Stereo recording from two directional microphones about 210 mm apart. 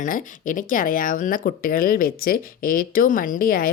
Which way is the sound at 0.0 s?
40° left (ahead or behind).